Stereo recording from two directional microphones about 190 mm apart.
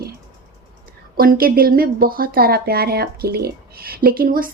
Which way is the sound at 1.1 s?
50° right (ahead or behind).